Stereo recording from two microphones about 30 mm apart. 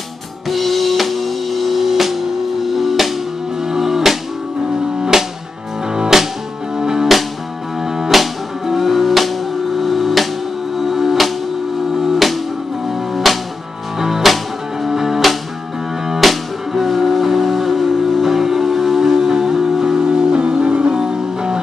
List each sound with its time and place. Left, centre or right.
0.5 s music: centre
5.1 s music: right; by 13.4 s centre
13.9 s music: centre
16.2 s music: centre; by 21.5 s right